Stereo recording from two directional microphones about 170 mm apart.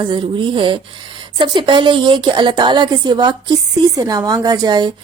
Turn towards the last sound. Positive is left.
turn(degrees=-25)  # may be behind; listen again after turning